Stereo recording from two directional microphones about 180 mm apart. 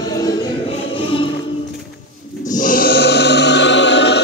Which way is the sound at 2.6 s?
55° left (ahead or behind).